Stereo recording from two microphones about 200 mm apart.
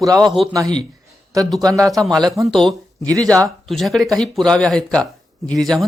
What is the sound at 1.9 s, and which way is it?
Speech, centre (ahead or behind).